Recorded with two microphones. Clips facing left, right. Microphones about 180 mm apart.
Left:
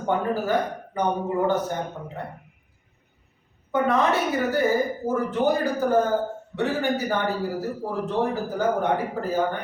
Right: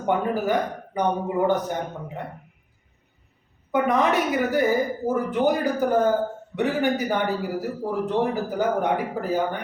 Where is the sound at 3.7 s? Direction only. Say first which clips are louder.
Right 1 dB; 15° right (ahead or behind).